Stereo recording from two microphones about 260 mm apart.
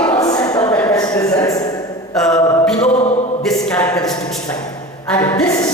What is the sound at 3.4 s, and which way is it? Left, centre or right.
A woman's voice, centre.